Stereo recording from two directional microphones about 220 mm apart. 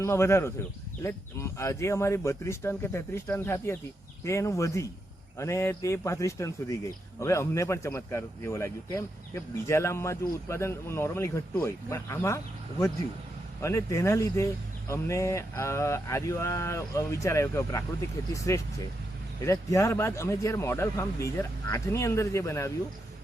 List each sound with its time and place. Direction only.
0.0 s speech: 10° left (ahead or behind)
13.6 s speech: 15° left (ahead or behind)